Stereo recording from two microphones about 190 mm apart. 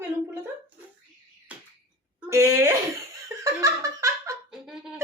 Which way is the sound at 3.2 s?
15° right (ahead or behind).